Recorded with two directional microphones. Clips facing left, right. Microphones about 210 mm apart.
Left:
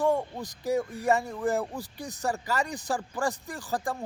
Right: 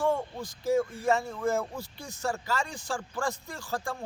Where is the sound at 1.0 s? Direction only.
15° left (ahead or behind).